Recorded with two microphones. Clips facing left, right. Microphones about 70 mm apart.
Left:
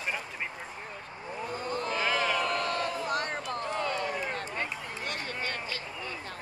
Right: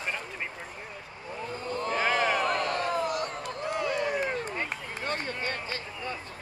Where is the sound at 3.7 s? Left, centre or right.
Centre.